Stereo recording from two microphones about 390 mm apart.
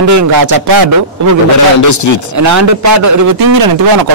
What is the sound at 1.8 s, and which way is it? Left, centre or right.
Speech, left.